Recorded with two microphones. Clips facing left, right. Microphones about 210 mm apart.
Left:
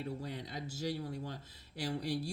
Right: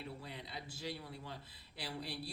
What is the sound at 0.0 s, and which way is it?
Speech, 45° left (ahead or behind).